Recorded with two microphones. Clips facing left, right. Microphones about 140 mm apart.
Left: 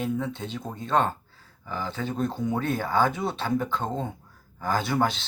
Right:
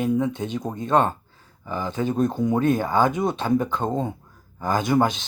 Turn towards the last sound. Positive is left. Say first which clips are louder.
# right 5 dB
turn(degrees=-15)  # may be behind; listen again after turning